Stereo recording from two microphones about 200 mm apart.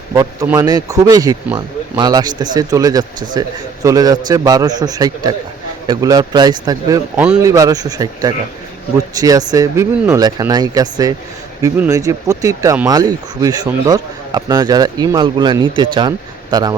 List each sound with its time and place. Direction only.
0.1 s speech: 15° right (ahead or behind)